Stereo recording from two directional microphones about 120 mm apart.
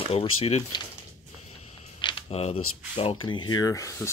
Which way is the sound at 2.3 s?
55° left (ahead or behind).